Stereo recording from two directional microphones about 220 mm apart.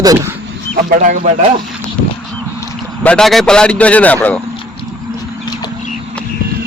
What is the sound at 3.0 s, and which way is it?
A man's voice, 5° left (ahead or behind).